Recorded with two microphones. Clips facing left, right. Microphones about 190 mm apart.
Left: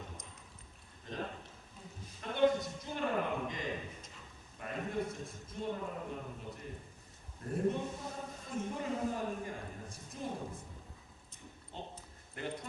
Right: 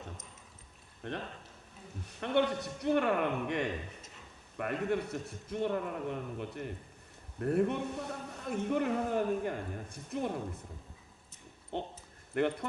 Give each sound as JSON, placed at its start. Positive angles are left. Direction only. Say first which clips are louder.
{"t": 1.0, "sound": "a sound", "louder": "right 6 dB", "side_deg": -65}
{"t": 2.0, "sound": "a man's voice", "louder": "even", "side_deg": -70}
{"t": 11.7, "sound": "a man's voice", "louder": "right 9 dB", "side_deg": -65}